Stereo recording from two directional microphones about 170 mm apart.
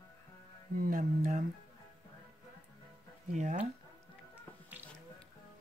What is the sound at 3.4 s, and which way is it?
Music, 45° right (ahead or behind).